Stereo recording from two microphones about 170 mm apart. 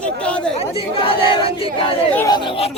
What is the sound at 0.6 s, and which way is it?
Speech, 35° left (ahead or behind).